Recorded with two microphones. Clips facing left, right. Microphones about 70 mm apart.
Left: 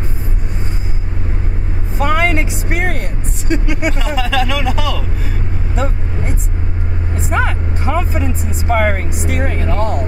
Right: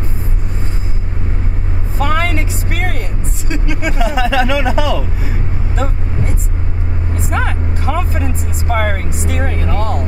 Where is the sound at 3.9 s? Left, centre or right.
Centre.